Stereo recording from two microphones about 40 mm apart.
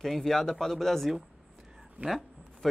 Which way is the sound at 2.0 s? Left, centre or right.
Right.